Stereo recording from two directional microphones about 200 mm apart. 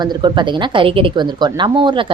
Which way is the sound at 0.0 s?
25° right (ahead or behind).